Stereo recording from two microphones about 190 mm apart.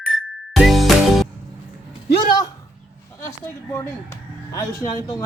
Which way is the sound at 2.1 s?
20° left (ahead or behind).